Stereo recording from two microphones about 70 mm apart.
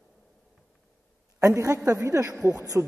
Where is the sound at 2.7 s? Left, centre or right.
Right.